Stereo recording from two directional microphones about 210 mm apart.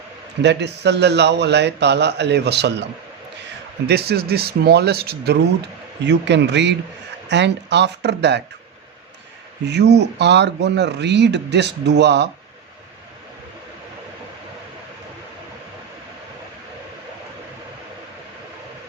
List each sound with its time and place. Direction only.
0.4 s speech: 55° right (ahead or behind)
9.6 s speech: 55° right (ahead or behind)